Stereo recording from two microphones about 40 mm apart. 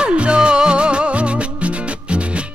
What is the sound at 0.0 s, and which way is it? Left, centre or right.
Music, right.